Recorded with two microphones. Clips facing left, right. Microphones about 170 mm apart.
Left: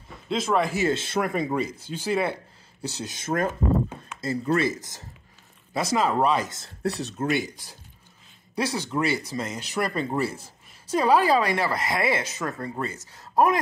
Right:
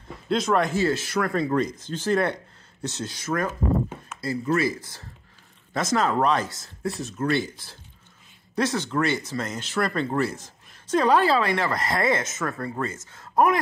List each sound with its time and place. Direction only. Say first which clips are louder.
0.3 s a man's voice: right 2 dB; 5° left (ahead or behind)
0.7 s speech: right 1 dB; 25° left (ahead or behind)
1.3 s speech: right 2 dB; 10° left (ahead or behind)
3.0 s speech: left 1 dB; 20° left (ahead or behind)
5.9 s speech: even; 5° left (ahead or behind)
6.8 s speech: left 2 dB; 70° left (ahead or behind)
7.2 s speech: right 2 dB; 15° left (ahead or behind)
8.5 s speech: right 2 dB; 10° left (ahead or behind)
12.2 s speech: right 1 dB; 30° left (ahead or behind)
12.4 s speech: right 1 dB; 20° left (ahead or behind)
12.9 s speech: left 1 dB; 35° left (ahead or behind)